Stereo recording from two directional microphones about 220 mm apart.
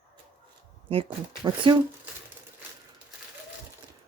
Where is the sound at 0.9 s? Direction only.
25° right (ahead or behind).